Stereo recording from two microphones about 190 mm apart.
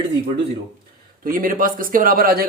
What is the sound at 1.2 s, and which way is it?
Speech, 45° right (ahead or behind).